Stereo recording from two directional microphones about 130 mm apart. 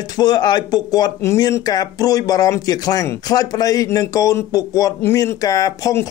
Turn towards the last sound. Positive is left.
turn(degrees=25)  # may be behind; listen again after turning